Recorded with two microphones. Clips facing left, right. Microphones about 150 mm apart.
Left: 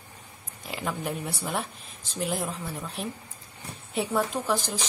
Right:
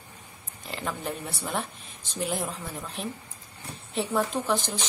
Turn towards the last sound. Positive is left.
turn(degrees=5)  # may be behind; listen again after turning